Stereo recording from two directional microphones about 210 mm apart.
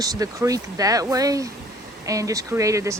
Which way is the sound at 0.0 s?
15° right (ahead or behind).